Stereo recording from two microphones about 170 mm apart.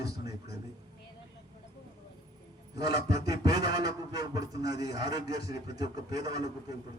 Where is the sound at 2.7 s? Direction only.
25° right (ahead or behind).